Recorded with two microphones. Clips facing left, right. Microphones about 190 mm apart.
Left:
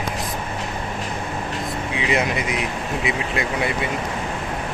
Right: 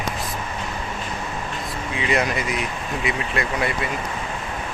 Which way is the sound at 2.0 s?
20° left (ahead or behind).